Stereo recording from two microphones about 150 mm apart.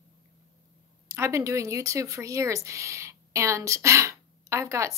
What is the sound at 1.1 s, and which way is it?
Speech, 20° right (ahead or behind).